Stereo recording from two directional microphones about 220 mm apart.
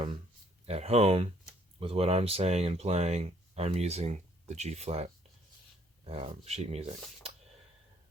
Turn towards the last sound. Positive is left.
turn(degrees=-30)  # may be behind; listen again after turning